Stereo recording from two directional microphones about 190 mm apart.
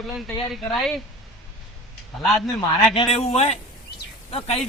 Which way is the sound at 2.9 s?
30° left (ahead or behind).